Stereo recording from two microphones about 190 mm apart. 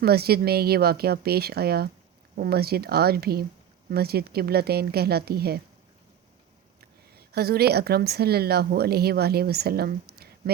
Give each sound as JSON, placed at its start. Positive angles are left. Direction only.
{"t": 0.0, "sound": "speech", "side_deg": -55}
{"t": 7.2, "sound": "speech", "side_deg": -55}